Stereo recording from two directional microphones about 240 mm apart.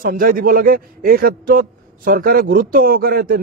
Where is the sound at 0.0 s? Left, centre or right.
Right.